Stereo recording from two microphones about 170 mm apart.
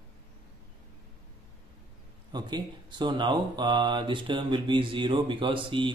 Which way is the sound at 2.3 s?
25° right (ahead or behind).